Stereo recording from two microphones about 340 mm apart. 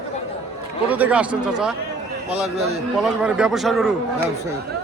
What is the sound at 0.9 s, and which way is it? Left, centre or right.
Speech, centre.